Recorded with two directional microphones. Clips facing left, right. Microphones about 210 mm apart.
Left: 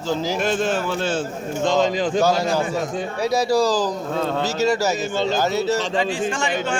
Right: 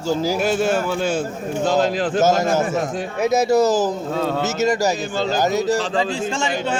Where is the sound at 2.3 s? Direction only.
45° right (ahead or behind).